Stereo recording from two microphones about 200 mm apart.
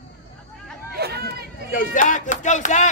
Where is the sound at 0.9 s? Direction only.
55° right (ahead or behind).